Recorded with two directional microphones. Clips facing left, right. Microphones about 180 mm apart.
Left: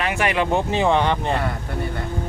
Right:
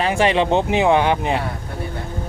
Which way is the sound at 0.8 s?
10° right (ahead or behind).